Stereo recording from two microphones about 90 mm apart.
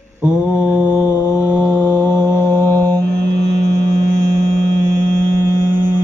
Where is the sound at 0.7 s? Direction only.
25° left (ahead or behind).